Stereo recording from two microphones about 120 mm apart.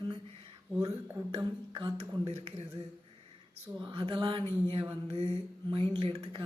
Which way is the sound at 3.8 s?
40° right (ahead or behind).